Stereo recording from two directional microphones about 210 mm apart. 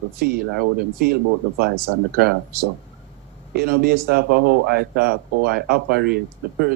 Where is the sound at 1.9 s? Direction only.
90° right.